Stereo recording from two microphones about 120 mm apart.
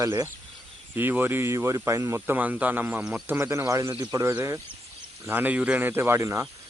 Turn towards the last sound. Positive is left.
turn(degrees=-25)  # may be behind; listen again after turning